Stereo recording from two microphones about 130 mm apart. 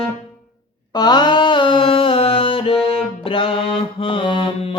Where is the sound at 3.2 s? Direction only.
45° left (ahead or behind).